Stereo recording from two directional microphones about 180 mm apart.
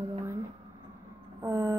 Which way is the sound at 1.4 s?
15° right (ahead or behind).